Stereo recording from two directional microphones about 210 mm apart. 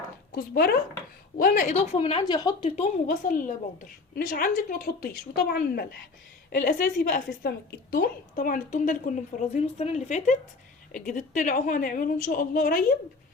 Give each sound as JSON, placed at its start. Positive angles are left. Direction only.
{"t": 0.3, "sound": "speech", "side_deg": 45}
{"t": 2.6, "sound": "a woman's voice", "side_deg": 35}